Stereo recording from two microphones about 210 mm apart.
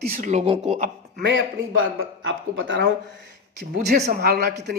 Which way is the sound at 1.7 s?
70° right (ahead or behind).